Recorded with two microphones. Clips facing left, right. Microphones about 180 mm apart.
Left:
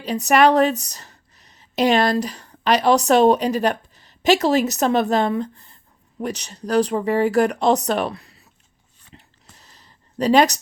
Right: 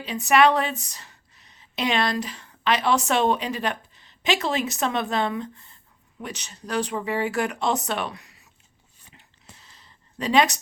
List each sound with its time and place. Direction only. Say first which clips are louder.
0.0 s speech: left 3 dB; 40° left (ahead or behind)
9.1 s dog: left 4 dB; 40° left (ahead or behind)
10.2 s speech: left 5 dB; 40° left (ahead or behind)